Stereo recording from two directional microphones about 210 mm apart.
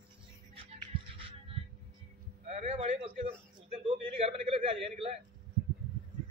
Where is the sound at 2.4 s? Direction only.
30° right (ahead or behind).